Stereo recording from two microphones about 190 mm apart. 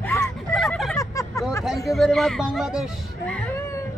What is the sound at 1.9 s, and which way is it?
A man's voice, centre (ahead or behind).